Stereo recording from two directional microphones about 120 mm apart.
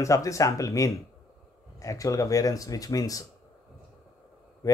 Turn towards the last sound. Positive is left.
turn(degrees=30)  # may be behind; listen again after turning